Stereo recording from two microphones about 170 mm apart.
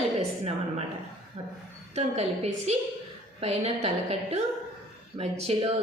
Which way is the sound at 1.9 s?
40° right (ahead or behind).